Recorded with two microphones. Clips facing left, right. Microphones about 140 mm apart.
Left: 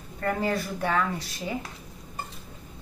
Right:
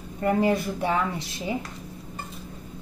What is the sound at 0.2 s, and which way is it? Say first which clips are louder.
A woman's voice: right 5 dB; 15° right (ahead or behind).